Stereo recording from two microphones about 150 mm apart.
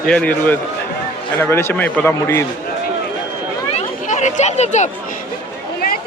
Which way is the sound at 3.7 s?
50° left (ahead or behind).